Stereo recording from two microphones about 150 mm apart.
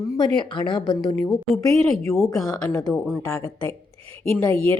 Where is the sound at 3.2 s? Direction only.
15° left (ahead or behind).